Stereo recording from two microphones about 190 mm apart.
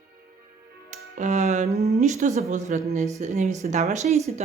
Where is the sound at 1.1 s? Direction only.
40° right (ahead or behind).